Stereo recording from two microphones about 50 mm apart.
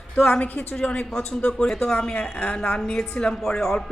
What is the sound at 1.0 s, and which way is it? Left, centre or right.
A woman's voice, centre.